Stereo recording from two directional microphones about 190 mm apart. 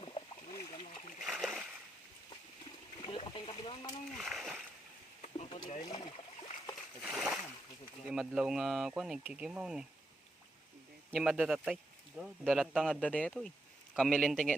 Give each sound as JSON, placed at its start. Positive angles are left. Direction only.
{"t": 0.0, "sound": "splash", "side_deg": 25}
{"t": 1.2, "sound": "splash", "side_deg": 0}
{"t": 3.0, "sound": "a sound", "side_deg": 25}
{"t": 4.2, "sound": "splash", "side_deg": 0}
{"t": 5.2, "sound": "a sound", "side_deg": 35}
{"t": 5.5, "sound": "boat", "side_deg": 20}
{"t": 7.0, "sound": "splash", "side_deg": 0}
{"t": 8.0, "sound": "speech", "side_deg": -5}
{"t": 11.1, "sound": "speech", "side_deg": 0}